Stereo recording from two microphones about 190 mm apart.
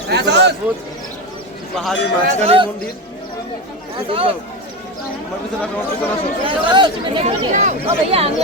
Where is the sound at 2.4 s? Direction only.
30° right (ahead or behind).